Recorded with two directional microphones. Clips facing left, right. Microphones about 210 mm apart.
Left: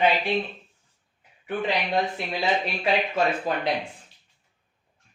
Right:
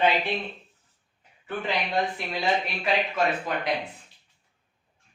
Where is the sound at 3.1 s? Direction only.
30° left (ahead or behind).